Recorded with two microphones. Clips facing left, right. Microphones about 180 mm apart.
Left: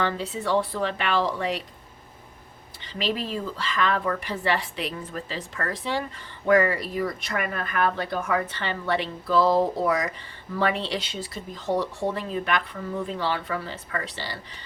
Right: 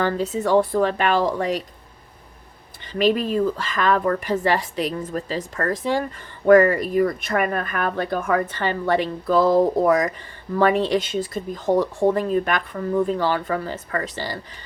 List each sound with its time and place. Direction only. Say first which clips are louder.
0.0 s a woman's voice: right 5 dB; 45° right (ahead or behind)
2.8 s a woman's voice: right 9 dB; 50° right (ahead or behind)